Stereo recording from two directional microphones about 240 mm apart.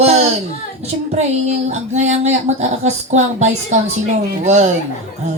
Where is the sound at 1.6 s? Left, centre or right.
Right.